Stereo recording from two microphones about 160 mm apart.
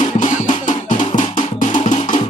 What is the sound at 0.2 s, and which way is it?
Music, 55° left (ahead or behind).